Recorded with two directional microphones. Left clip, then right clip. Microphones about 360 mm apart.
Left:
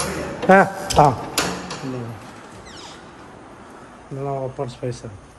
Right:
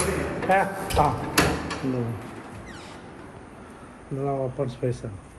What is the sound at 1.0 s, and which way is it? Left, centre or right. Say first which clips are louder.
Speech: left 8 dB; left.